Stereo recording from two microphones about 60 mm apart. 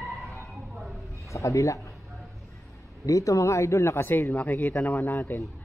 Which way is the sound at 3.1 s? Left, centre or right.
Left.